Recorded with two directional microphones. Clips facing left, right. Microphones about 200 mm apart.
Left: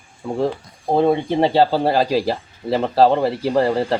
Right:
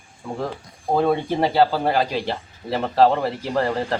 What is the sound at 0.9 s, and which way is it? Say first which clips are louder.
Speech: left 3 dB; 25° left (ahead or behind).